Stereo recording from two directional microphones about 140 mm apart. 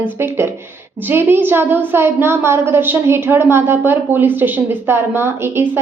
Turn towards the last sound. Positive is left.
turn(degrees=-15)  # may be behind; listen again after turning